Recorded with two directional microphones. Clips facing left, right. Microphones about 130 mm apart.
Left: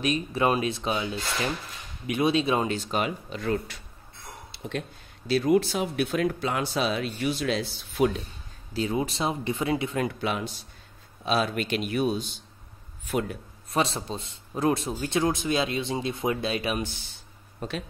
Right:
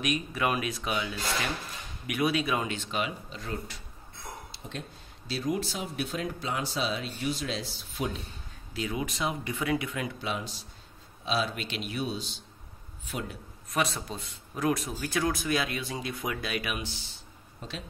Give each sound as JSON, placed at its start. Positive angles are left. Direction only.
{"t": 0.0, "sound": "a man's voice", "side_deg": 30}
{"t": 2.0, "sound": "a man's voice", "side_deg": 25}
{"t": 3.3, "sound": "speech", "side_deg": 65}
{"t": 8.7, "sound": "a man's voice", "side_deg": 30}
{"t": 9.9, "sound": "a man's voice", "side_deg": 60}
{"t": 13.7, "sound": "a man's voice", "side_deg": 30}
{"t": 17.6, "sound": "speech", "side_deg": 55}